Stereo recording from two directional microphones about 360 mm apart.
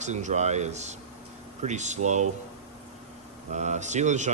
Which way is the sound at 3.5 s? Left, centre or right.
Centre.